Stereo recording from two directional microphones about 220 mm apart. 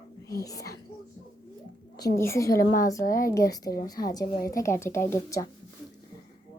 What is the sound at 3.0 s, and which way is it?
Speech, 40° left (ahead or behind).